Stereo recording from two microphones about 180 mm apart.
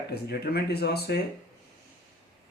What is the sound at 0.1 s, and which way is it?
Speech, 60° left (ahead or behind).